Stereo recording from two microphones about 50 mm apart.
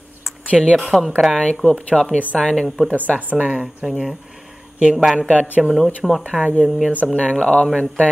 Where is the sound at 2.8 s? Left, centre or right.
Right.